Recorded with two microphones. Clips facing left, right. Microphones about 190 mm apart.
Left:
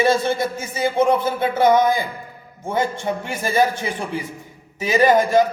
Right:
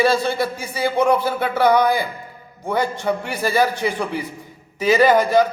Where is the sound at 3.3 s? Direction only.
20° left (ahead or behind).